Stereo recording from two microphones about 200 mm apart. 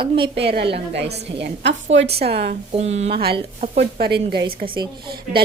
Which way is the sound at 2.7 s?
30° right (ahead or behind).